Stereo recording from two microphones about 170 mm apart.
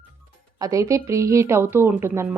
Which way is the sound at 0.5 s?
20° right (ahead or behind).